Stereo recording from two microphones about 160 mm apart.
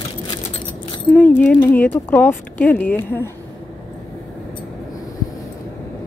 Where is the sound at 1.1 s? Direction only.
10° left (ahead or behind).